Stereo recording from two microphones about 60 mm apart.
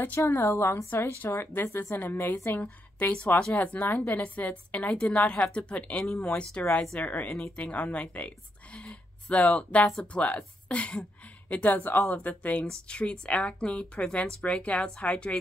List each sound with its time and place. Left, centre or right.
0.3 s a woman's voice: left
2.5 s a woman's voice: left
8.7 s a sound: left
10.1 s a woman's voice: left